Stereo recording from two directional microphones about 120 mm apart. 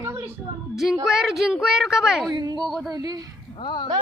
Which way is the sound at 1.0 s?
Centre (ahead or behind).